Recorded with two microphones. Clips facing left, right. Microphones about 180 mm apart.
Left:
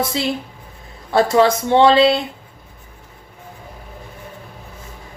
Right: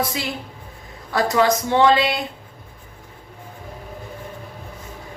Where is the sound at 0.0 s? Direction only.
25° left (ahead or behind).